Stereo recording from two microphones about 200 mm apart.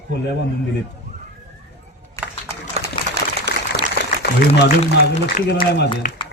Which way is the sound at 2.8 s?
35° right (ahead or behind).